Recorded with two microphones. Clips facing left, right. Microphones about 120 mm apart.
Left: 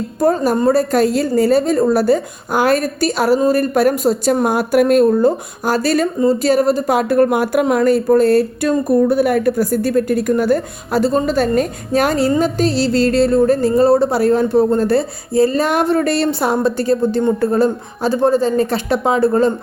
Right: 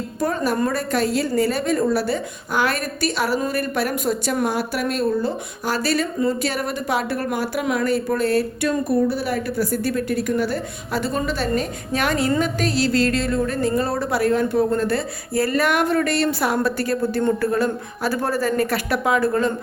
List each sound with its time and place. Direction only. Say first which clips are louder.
0.2 s a woman's voice: left 7 dB; 40° left (ahead or behind)
7.6 s a woman's voice: left 7 dB; 40° left (ahead or behind)